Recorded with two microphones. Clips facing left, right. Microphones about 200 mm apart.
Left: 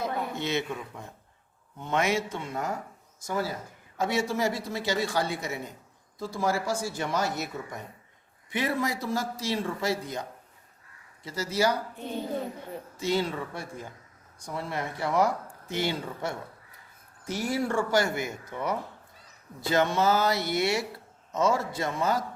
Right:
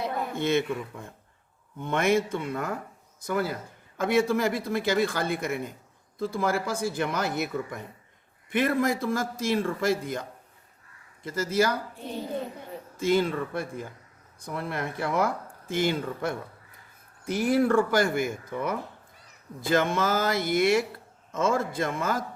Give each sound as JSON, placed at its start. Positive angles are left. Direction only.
{"t": 0.3, "sound": "speech", "side_deg": -55}
{"t": 13.0, "sound": "speech", "side_deg": -50}